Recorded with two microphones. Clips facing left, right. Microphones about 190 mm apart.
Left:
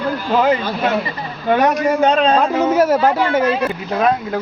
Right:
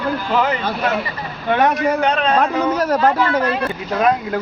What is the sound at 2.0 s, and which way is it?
Speech, 30° left (ahead or behind).